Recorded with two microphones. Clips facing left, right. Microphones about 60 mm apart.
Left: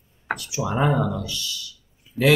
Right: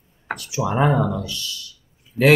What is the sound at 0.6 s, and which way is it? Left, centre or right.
Speech, centre.